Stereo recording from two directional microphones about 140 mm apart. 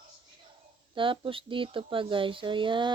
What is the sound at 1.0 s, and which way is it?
Speech, 40° right (ahead or behind).